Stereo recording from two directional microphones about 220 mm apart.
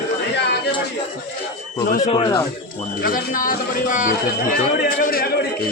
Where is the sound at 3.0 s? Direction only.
40° left (ahead or behind).